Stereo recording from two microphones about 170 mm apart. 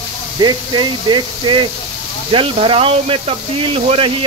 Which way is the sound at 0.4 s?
25° right (ahead or behind).